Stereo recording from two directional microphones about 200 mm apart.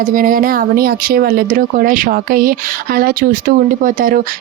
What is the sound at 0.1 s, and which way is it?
Speech, 45° right (ahead or behind).